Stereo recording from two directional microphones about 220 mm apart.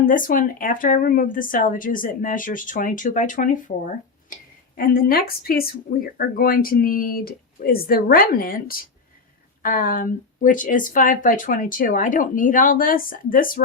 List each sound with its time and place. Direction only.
0.0 s speech: 40° left (ahead or behind)
4.8 s speech: 40° left (ahead or behind)